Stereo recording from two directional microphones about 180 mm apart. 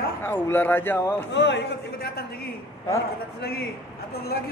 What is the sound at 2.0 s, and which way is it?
Speech, 60° left (ahead or behind).